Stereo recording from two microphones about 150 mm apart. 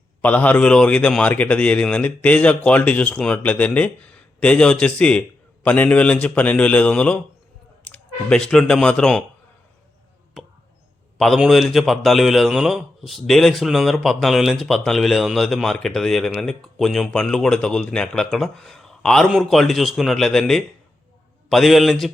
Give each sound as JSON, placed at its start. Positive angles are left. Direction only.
{"t": 0.2, "sound": "a man's voice", "side_deg": 10}
{"t": 10.4, "sound": "a sound", "side_deg": 0}
{"t": 11.2, "sound": "a man's voice", "side_deg": 0}